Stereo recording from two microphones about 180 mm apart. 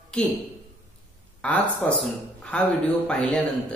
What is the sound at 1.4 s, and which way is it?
A man's voice, 5° left (ahead or behind).